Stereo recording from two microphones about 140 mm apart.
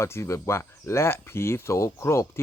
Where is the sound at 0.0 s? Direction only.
20° left (ahead or behind).